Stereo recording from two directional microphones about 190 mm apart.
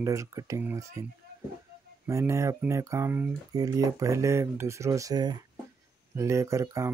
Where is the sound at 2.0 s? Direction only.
15° right (ahead or behind).